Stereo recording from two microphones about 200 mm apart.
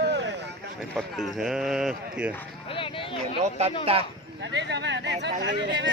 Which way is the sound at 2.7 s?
25° left (ahead or behind).